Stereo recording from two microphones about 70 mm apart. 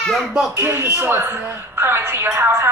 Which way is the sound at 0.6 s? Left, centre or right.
Right.